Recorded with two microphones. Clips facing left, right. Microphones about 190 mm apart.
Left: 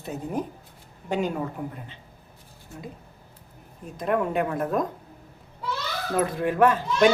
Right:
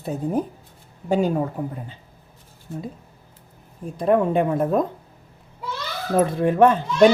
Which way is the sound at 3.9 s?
30° right (ahead or behind).